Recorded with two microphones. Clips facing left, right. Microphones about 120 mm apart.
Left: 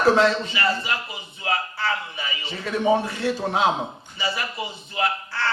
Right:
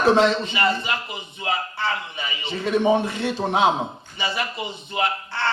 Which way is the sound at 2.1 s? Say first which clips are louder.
Right 3 dB; 20° right (ahead or behind).